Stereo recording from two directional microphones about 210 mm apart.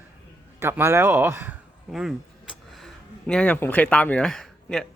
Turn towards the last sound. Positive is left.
turn(degrees=0)  # may be behind; listen again after turning